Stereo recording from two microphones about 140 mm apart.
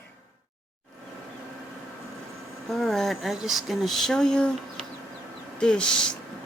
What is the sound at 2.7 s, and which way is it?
Speech, centre (ahead or behind).